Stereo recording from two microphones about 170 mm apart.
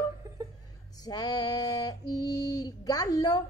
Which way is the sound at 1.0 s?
20° left (ahead or behind).